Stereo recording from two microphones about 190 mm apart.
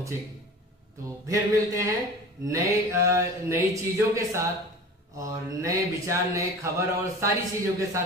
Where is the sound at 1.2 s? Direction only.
15° right (ahead or behind).